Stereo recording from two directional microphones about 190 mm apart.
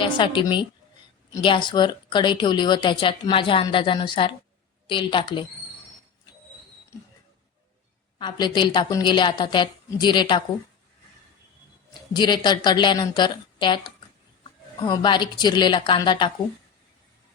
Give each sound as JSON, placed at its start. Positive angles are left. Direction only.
{"t": 0.0, "sound": "speech", "side_deg": 25}
{"t": 8.2, "sound": "speech", "side_deg": 25}
{"t": 12.1, "sound": "speech", "side_deg": 25}